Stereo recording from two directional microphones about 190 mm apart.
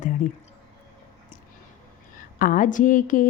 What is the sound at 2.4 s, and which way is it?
Speech, 45° left (ahead or behind).